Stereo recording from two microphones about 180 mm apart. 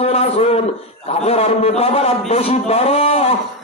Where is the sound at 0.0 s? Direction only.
35° left (ahead or behind).